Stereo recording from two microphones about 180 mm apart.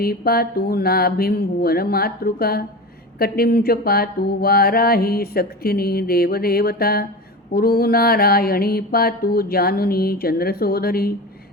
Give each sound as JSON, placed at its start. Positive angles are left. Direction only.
{"t": 0.0, "sound": "mantra", "side_deg": 55}